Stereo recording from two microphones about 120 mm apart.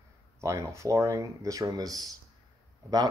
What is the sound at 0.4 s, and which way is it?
Speech, 25° right (ahead or behind).